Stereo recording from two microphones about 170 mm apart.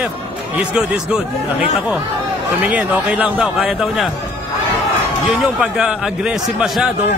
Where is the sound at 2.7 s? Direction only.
10° right (ahead or behind).